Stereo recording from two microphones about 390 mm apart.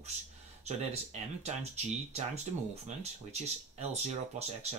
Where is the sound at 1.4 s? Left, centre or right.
Centre.